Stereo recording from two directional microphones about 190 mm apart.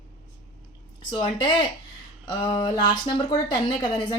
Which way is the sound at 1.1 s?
25° left (ahead or behind).